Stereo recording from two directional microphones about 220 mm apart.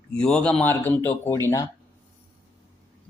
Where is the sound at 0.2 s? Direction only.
5° left (ahead or behind).